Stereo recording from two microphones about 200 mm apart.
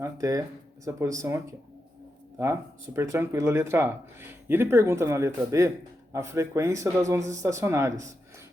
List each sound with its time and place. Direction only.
0.0 s speech: 15° right (ahead or behind)